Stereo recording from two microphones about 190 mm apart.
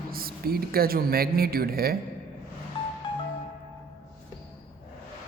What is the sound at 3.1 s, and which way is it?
Music, 30° left (ahead or behind).